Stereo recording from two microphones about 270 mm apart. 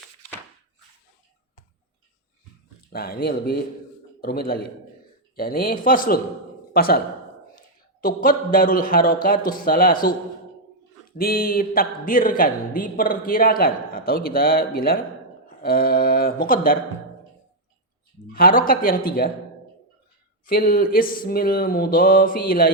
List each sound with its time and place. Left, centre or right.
2.9 s speech: left
8.0 s speech: left
11.2 s speech: left
18.3 s speech: left
20.4 s speech: left